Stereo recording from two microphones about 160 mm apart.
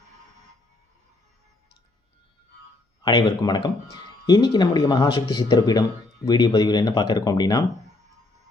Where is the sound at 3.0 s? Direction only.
25° left (ahead or behind).